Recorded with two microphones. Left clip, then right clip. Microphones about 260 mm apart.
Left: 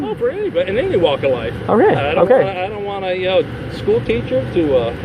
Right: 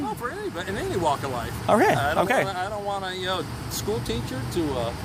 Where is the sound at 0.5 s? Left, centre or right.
Right.